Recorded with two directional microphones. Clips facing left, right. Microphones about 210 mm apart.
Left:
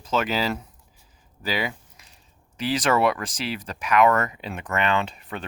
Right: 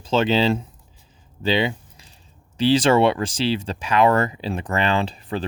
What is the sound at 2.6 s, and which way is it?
Speech, 30° right (ahead or behind).